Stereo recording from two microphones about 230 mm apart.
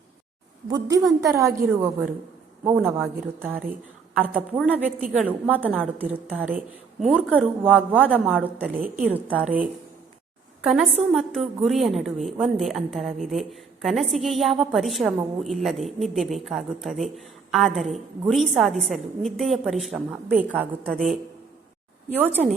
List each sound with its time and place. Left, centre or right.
0.7 s a woman's voice: centre
10.6 s a woman's voice: centre